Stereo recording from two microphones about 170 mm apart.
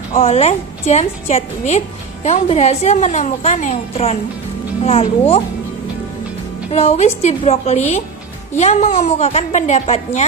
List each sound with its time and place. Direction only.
0.2 s a woman's voice: 35° left (ahead or behind)
6.7 s a woman's voice: 40° left (ahead or behind)